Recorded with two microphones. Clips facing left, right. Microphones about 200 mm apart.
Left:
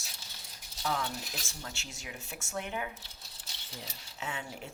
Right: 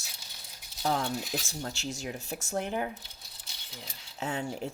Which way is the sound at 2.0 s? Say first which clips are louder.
Right 8 dB; 35° right (ahead or behind).